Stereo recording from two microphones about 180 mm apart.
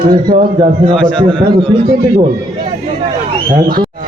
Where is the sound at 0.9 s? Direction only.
5° left (ahead or behind).